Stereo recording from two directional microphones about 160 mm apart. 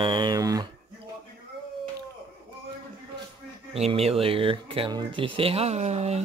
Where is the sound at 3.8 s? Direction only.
40° right (ahead or behind).